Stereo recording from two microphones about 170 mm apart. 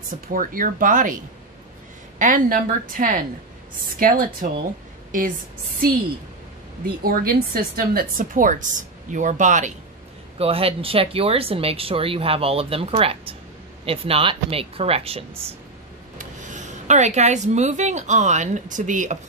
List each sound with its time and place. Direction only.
0.3 s speech: 55° right (ahead or behind)
7.0 s speech: 60° right (ahead or behind)
10.4 s speech: 35° right (ahead or behind)
16.2 s speech: 45° right (ahead or behind)